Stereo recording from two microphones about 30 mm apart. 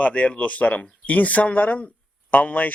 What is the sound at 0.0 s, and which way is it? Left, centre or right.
Speech, left.